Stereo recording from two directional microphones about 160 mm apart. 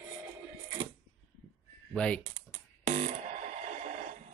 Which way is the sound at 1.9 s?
5° left (ahead or behind).